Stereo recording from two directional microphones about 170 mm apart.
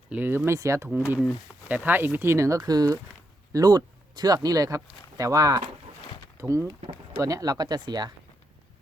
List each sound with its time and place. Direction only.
0.1 s speech: 10° right (ahead or behind)
0.9 s speech: 5° right (ahead or behind); by 8.1 s 25° right (ahead or behind)